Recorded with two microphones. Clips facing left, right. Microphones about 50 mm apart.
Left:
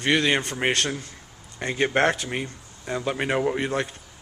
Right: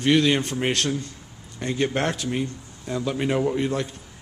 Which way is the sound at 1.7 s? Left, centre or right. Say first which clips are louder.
Left 3 dB; left.